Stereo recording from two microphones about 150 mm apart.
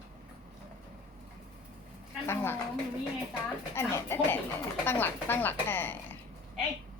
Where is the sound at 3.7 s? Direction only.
15° left (ahead or behind).